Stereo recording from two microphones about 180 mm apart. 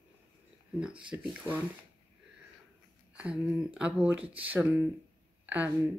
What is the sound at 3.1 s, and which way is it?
Speech, 5° right (ahead or behind).